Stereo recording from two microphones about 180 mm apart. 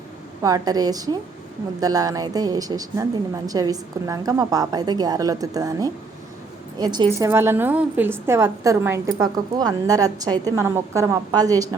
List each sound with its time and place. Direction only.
0.4 s a woman's voice: 20° right (ahead or behind)